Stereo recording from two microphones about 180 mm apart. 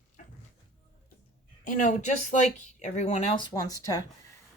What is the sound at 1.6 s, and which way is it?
Speech, 45° left (ahead or behind).